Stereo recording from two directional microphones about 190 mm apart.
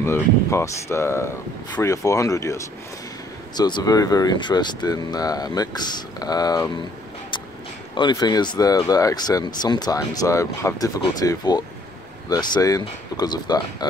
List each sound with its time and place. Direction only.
0.0 s speech: 15° left (ahead or behind)
7.9 s speech: 25° left (ahead or behind)